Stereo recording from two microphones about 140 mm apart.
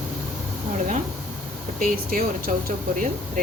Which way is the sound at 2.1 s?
90° right.